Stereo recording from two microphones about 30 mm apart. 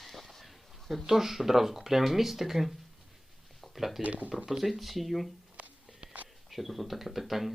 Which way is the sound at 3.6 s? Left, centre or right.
Centre.